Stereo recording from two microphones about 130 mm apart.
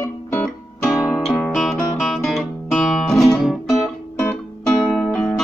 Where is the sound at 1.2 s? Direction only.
Centre (ahead or behind).